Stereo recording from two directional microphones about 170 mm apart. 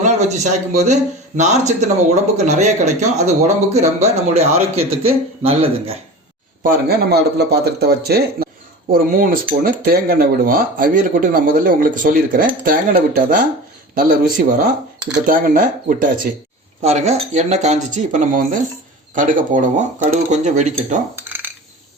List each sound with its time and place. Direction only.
0.0 s a man's voice: 45° right (ahead or behind)
6.6 s a man's voice: 60° right (ahead or behind)
16.8 s speech: 40° right (ahead or behind)
21.2 s a sound: 10° right (ahead or behind)